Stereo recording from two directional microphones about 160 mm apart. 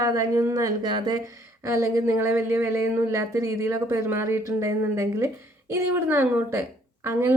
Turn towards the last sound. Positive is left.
turn(degrees=-15)  # may be behind; listen again after turning